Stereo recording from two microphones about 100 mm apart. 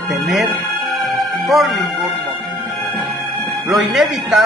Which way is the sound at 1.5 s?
Centre (ahead or behind).